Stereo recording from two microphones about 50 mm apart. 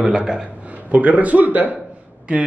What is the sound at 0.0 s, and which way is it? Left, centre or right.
Speech, centre.